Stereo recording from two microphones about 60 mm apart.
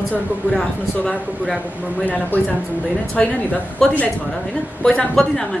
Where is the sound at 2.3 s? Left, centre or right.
Left.